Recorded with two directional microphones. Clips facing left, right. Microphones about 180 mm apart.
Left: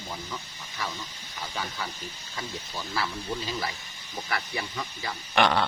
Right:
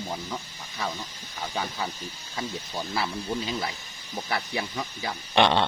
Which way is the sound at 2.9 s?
20° right (ahead or behind).